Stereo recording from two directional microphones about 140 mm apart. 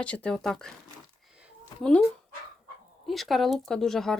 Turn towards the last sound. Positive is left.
turn(degrees=5)  # may be behind; listen again after turning